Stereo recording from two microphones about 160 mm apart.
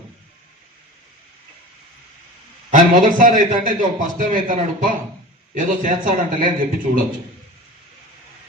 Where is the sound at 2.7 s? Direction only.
55° right (ahead or behind).